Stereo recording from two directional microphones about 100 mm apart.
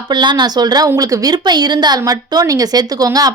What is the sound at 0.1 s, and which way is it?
A woman's voice, 50° right (ahead or behind).